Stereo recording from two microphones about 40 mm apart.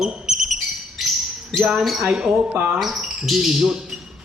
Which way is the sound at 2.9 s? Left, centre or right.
Centre.